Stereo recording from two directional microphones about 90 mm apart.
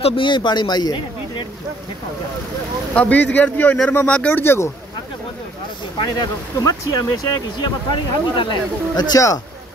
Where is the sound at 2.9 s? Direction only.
15° left (ahead or behind).